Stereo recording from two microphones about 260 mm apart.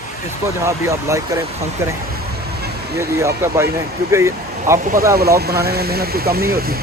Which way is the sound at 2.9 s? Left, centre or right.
Centre.